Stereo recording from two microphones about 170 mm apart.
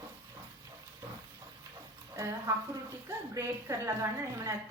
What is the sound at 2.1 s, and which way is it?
A woman's voice, 20° right (ahead or behind).